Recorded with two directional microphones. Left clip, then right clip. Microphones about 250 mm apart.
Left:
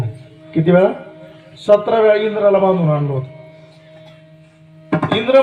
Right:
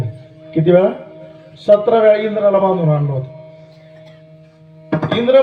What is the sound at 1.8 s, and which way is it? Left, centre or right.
A man's voice, right.